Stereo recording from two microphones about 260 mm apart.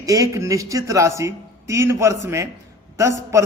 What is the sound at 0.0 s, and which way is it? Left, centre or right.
A man's voice, centre.